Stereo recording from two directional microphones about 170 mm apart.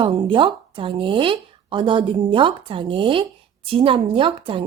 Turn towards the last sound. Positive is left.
turn(degrees=-30)  # may be behind; listen again after turning